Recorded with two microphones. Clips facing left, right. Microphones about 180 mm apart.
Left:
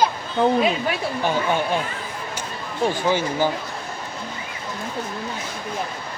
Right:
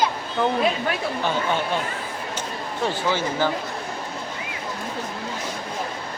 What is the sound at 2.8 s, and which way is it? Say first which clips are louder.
Speech: left 3 dB; 15° left (ahead or behind).